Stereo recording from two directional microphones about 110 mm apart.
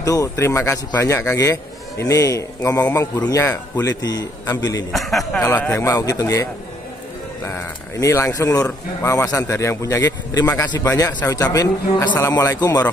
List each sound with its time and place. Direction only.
0.0 s a man's voice: 30° left (ahead or behind)
4.9 s a man's voice: centre (ahead or behind)
5.6 s a man's voice: 20° left (ahead or behind)